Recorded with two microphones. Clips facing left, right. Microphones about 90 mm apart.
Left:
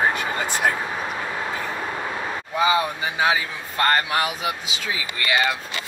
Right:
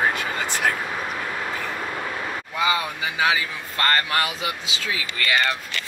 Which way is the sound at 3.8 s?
15° left (ahead or behind).